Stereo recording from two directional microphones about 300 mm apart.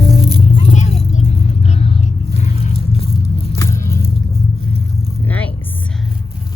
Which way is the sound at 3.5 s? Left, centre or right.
Centre.